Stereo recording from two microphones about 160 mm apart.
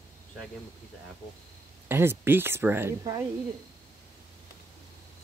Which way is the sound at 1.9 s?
15° right (ahead or behind).